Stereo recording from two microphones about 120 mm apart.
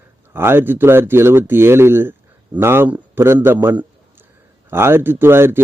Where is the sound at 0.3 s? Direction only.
20° right (ahead or behind).